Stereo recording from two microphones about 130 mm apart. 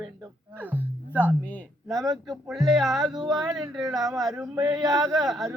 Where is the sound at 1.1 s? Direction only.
15° right (ahead or behind).